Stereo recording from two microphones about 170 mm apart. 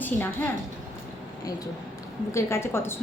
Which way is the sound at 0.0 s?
10° left (ahead or behind).